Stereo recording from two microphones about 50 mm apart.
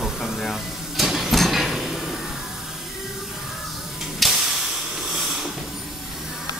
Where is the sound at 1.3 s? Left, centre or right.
Centre.